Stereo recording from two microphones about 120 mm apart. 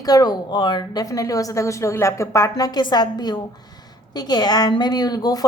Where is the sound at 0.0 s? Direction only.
30° left (ahead or behind).